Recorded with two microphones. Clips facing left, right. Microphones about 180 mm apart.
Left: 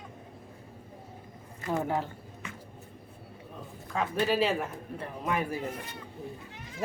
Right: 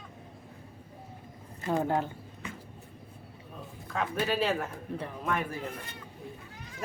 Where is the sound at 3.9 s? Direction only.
Centre (ahead or behind).